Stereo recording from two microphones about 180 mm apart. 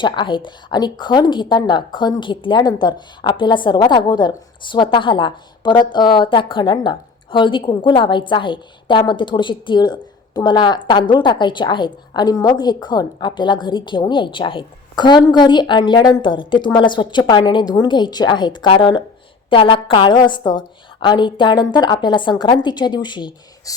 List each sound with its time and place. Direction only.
0.0 s a woman's voice: 25° left (ahead or behind)